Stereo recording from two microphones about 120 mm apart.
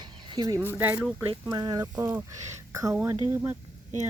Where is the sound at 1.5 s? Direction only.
30° right (ahead or behind).